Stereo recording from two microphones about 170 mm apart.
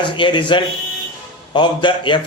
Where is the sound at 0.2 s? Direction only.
30° left (ahead or behind).